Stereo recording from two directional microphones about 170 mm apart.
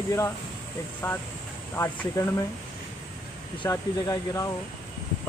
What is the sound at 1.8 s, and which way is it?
Speech, 20° left (ahead or behind).